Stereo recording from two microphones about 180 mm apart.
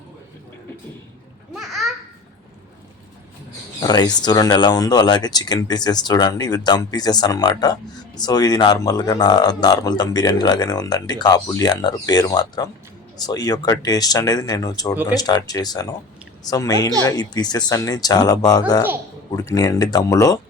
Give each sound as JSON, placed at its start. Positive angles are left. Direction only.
{"t": 1.5, "sound": "babbling", "side_deg": 0}
{"t": 3.8, "sound": "speech", "side_deg": 20}